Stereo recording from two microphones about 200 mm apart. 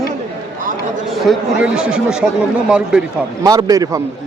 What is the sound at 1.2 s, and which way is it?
Speech, 5° right (ahead or behind).